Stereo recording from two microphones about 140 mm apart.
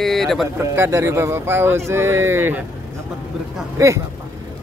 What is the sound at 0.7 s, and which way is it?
Speech, 20° right (ahead or behind).